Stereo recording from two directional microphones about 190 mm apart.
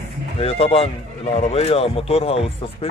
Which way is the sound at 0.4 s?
30° left (ahead or behind).